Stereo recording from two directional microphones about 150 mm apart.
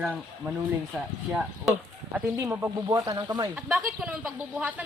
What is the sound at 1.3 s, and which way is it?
Speech, 10° right (ahead or behind).